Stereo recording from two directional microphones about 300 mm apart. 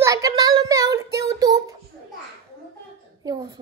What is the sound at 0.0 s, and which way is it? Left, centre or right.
Child singing, centre.